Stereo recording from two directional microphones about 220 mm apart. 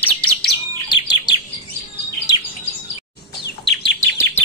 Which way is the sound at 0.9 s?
20° left (ahead or behind).